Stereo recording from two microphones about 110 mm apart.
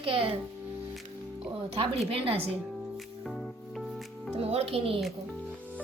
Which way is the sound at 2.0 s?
60° right (ahead or behind).